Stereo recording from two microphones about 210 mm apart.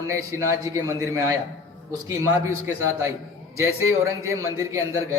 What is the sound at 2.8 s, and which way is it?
A man's voice, 15° right (ahead or behind).